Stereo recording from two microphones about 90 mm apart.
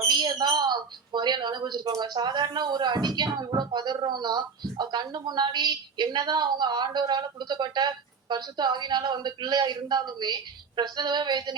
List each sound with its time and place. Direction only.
0.1 s speech: 55° right (ahead or behind)